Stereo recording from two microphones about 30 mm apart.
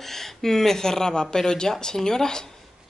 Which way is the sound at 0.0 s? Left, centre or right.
Centre.